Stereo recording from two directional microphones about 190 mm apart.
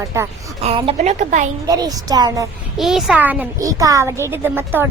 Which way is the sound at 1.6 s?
20° right (ahead or behind).